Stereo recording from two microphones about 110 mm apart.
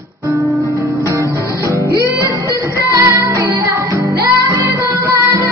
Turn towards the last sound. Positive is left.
turn(degrees=-25)  # may be behind; listen again after turning